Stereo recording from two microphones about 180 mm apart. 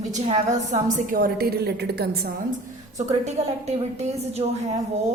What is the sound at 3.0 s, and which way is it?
A woman's voice, 40° right (ahead or behind).